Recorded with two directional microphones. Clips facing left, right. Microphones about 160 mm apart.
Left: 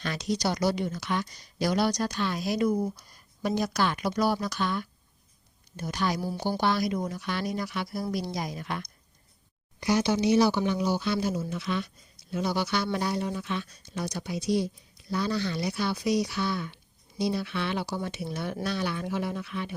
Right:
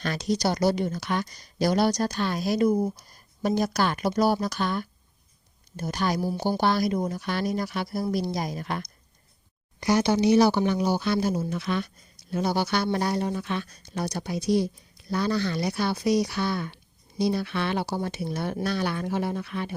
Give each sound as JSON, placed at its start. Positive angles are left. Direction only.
{"t": 0.0, "sound": "speech", "side_deg": -40}
{"t": 4.2, "sound": "speech", "side_deg": -35}
{"t": 10.2, "sound": "speech", "side_deg": -70}
{"t": 10.5, "sound": "speech", "side_deg": -50}
{"t": 12.3, "sound": "speech", "side_deg": -40}
{"t": 12.6, "sound": "speech", "side_deg": -55}
{"t": 14.0, "sound": "speech", "side_deg": -40}
{"t": 15.1, "sound": "speech", "side_deg": -50}